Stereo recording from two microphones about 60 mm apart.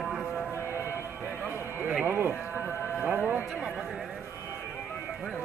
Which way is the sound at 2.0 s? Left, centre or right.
Right.